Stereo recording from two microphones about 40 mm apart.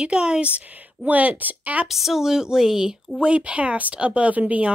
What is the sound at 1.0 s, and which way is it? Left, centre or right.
Speech, right.